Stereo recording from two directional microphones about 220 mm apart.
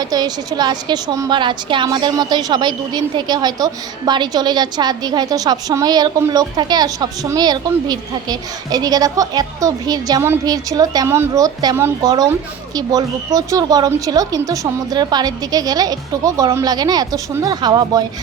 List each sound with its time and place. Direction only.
0.0 s a woman's voice: 20° right (ahead or behind)